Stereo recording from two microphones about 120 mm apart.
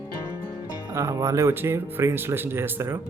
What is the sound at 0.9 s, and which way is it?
Speech, 25° right (ahead or behind).